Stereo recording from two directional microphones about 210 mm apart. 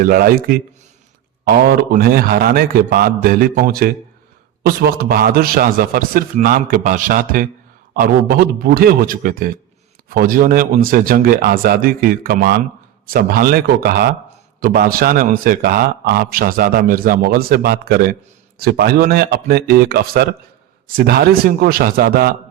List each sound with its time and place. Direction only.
0.0 s a man's voice: 45° right (ahead or behind)